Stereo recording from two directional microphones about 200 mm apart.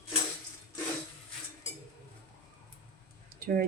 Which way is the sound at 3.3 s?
45° right (ahead or behind).